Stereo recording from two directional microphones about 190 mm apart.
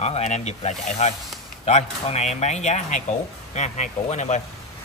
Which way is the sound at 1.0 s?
35° left (ahead or behind).